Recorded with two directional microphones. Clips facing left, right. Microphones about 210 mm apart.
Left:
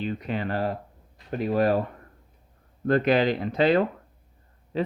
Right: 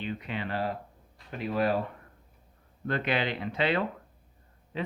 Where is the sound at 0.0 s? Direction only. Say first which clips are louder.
Left 6 dB; 40° left (ahead or behind).